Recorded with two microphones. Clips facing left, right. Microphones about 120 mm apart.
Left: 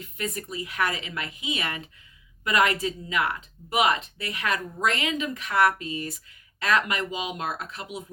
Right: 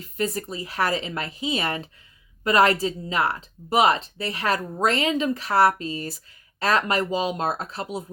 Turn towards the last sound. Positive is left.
turn(degrees=-35)  # may be behind; listen again after turning